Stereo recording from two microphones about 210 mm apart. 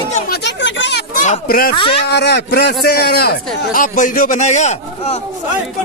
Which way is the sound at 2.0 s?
50° left (ahead or behind).